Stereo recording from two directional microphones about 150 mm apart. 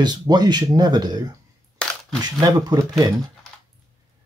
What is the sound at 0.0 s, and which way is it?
Speech, 30° right (ahead or behind).